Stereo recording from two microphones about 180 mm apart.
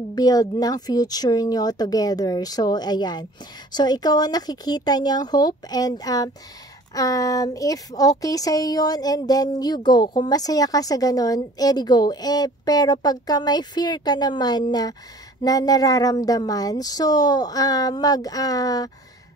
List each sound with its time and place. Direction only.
0.1 s speech: 20° left (ahead or behind)